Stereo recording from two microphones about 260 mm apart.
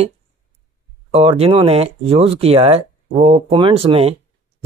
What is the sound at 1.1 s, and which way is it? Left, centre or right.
Speech, right.